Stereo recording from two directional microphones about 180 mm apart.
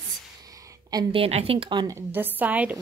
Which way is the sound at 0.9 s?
30° right (ahead or behind).